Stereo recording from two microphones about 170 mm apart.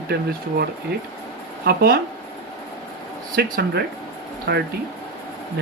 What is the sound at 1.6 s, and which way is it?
Speech, 65° right (ahead or behind).